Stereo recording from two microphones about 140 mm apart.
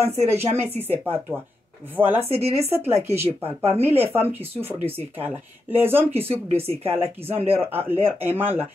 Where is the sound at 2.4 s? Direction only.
45° right (ahead or behind).